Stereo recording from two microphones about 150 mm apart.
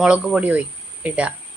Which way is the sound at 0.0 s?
5° right (ahead or behind).